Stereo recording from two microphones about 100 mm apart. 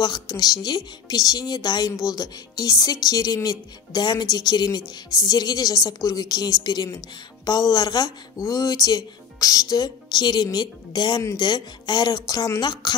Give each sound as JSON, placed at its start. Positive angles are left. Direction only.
{"t": 0.0, "sound": "speech", "side_deg": 45}